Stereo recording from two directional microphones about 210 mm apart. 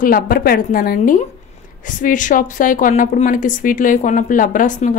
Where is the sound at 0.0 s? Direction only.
45° left (ahead or behind).